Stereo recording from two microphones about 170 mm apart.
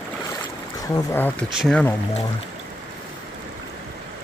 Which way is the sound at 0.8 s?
15° left (ahead or behind).